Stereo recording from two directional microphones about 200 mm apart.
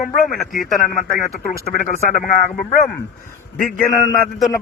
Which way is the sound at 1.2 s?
40° left (ahead or behind).